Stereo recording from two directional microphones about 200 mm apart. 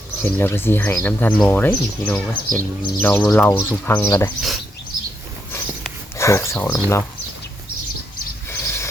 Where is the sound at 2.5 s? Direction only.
45° right (ahead or behind).